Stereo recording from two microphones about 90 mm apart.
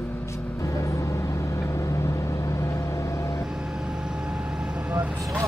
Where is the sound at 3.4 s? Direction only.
5° right (ahead or behind).